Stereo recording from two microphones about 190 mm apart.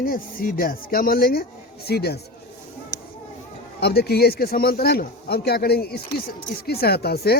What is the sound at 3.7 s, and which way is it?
A man's voice, 55° left (ahead or behind).